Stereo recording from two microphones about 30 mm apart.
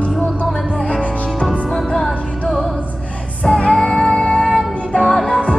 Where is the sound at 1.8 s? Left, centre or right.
Left.